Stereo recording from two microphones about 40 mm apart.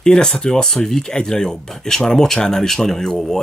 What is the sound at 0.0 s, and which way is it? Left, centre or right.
Speech, centre.